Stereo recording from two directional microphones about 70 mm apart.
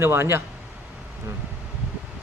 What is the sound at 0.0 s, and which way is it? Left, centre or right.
Speech, right.